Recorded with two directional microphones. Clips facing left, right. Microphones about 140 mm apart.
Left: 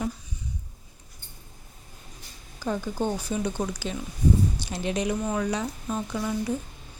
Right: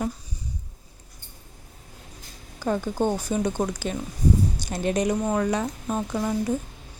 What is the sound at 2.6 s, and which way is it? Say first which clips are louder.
Speech: right 4 dB; 50° right (ahead or behind).